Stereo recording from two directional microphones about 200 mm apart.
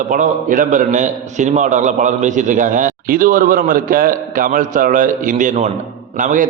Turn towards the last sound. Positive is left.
turn(degrees=-40)  # may be behind; listen again after turning